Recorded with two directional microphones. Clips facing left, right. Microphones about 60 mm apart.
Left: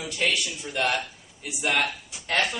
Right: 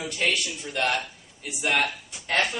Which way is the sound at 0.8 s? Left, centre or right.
Centre.